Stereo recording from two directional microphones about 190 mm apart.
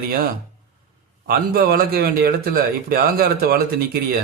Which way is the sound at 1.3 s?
50° right (ahead or behind).